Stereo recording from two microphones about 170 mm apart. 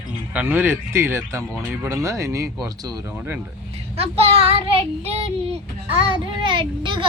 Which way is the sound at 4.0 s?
35° right (ahead or behind).